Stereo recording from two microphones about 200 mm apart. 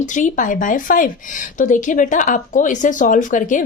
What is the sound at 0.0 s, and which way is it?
A woman's voice, 40° left (ahead or behind).